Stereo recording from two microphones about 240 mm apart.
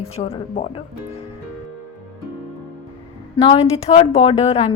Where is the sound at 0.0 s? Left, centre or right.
Left.